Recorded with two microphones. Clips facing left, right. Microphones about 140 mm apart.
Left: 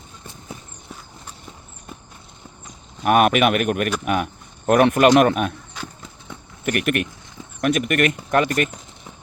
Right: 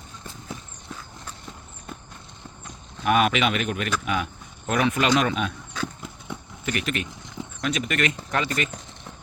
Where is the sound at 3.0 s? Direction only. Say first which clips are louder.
Left 5 dB; 50° left (ahead or behind).